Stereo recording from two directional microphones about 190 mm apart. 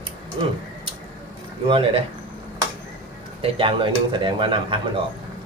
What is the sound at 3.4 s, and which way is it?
Speech, 30° right (ahead or behind).